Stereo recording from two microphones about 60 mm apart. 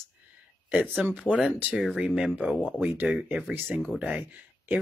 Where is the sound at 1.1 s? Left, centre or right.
Centre.